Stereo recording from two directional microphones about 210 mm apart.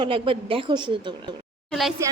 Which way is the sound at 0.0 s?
25° right (ahead or behind).